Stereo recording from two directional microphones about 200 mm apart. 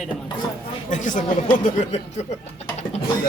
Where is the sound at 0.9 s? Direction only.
40° left (ahead or behind).